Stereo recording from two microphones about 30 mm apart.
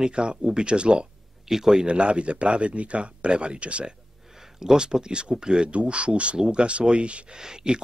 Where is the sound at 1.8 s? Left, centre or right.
Right.